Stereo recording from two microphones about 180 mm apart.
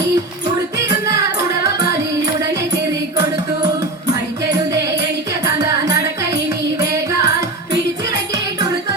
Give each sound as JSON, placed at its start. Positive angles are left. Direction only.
{"t": 0.8, "sound": "music", "side_deg": -15}
{"t": 4.1, "sound": "music", "side_deg": -20}